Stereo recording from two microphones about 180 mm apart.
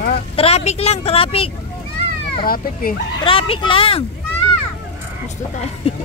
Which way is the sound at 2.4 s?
55° left (ahead or behind).